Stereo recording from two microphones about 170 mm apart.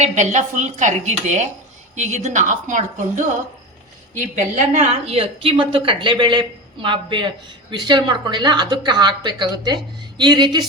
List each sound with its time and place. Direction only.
0.0 s speech: 40° right (ahead or behind)
4.4 s a woman's voice: 40° right (ahead or behind)